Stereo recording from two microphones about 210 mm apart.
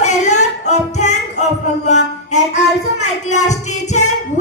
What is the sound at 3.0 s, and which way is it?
Speech, 35° left (ahead or behind).